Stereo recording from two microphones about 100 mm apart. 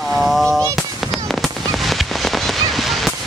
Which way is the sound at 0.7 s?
Centre (ahead or behind).